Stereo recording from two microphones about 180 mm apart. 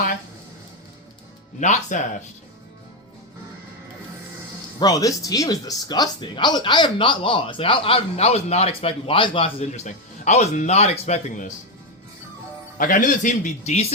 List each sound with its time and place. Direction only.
1.5 s speech: 40° left (ahead or behind)
4.8 s speech: 20° left (ahead or behind); by 11.5 s 40° left (ahead or behind)
12.7 s speech: 45° left (ahead or behind)